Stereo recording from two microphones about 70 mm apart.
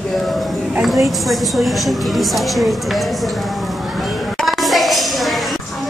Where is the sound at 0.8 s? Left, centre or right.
Centre.